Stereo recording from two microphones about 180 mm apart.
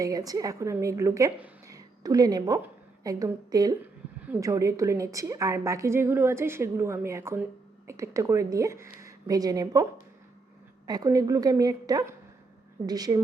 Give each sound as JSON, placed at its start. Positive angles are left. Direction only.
{"t": 0.0, "sound": "a woman's voice", "side_deg": -20}
{"t": 10.8, "sound": "a woman's voice", "side_deg": -20}